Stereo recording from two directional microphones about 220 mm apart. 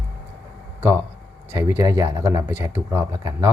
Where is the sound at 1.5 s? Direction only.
30° left (ahead or behind).